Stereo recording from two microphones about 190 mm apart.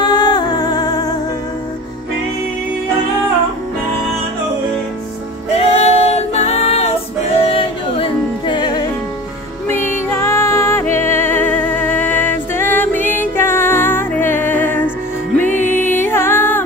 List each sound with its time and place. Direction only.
0.0 s music: 20° left (ahead or behind)
5.6 s music: 35° left (ahead or behind)
9.7 s music: 10° left (ahead or behind)